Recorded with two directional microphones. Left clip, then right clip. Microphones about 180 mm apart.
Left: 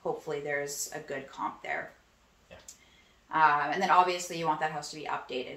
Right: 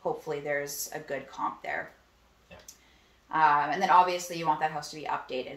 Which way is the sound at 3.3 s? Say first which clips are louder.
Right 1 dB; 15° right (ahead or behind).